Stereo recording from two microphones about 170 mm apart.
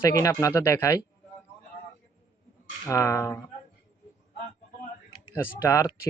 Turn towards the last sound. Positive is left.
turn(degrees=20)  # may be behind; listen again after turning